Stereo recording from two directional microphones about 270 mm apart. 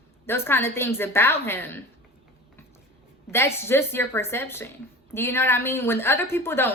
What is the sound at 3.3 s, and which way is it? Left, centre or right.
A woman's voice, centre.